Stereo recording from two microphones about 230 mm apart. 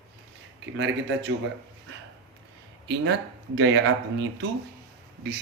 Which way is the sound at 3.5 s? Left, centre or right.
Right.